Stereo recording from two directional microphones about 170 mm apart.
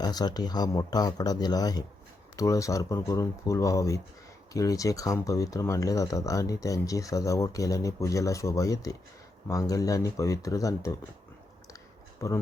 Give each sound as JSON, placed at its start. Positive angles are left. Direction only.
{"t": 0.0, "sound": "speech", "side_deg": 25}
{"t": 12.2, "sound": "speech", "side_deg": 20}